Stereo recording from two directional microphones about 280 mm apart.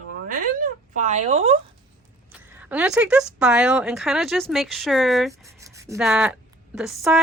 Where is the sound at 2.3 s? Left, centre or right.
Centre.